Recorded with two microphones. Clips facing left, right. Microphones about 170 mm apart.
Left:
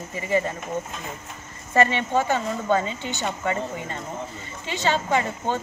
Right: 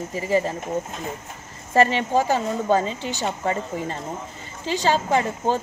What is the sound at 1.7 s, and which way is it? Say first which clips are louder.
Speech: right 2 dB; 35° right (ahead or behind).